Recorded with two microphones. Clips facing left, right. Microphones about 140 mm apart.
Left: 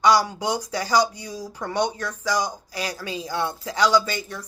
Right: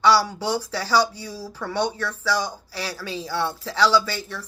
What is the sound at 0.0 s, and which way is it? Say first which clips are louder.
A woman's voice: even; 15° left (ahead or behind).